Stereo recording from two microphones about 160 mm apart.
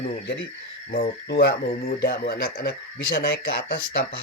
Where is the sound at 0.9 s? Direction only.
80° left.